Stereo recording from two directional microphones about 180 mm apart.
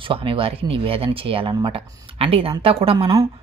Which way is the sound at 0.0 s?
30° right (ahead or behind).